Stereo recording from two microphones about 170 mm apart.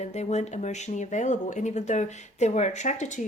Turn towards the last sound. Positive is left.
turn(degrees=45)  # may be behind; listen again after turning